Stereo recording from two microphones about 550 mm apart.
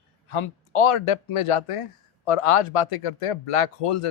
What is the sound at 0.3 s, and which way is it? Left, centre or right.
Speech, left.